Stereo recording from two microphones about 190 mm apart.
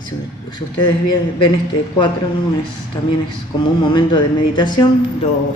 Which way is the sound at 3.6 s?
25° left (ahead or behind).